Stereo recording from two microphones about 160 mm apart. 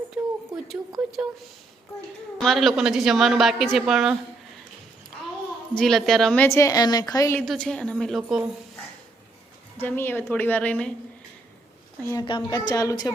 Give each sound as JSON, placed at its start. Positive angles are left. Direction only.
{"t": 0.1, "sound": "a sound", "side_deg": -5}
{"t": 2.4, "sound": "speech", "side_deg": 0}
{"t": 5.7, "sound": "a woman's voice", "side_deg": 0}
{"t": 7.4, "sound": "speech", "side_deg": 5}
{"t": 9.8, "sound": "a woman's voice", "side_deg": 10}
{"t": 12.1, "sound": "a woman's voice", "side_deg": 30}